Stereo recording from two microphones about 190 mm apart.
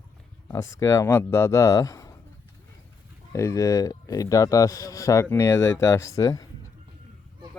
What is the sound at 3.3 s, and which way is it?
A man's voice, 15° left (ahead or behind).